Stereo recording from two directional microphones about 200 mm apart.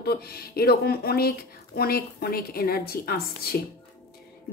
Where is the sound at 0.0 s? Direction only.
50° left (ahead or behind).